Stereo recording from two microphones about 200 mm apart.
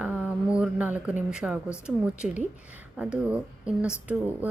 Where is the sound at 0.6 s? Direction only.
5° right (ahead or behind).